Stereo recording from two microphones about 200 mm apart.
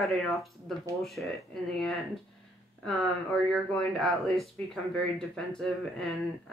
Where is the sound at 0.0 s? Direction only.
Centre (ahead or behind).